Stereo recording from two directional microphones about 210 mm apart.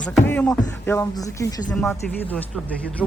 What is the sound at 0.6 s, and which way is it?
Speech, 15° left (ahead or behind).